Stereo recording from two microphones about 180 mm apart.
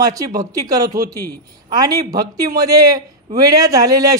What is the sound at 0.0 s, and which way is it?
A man's voice, 20° right (ahead or behind).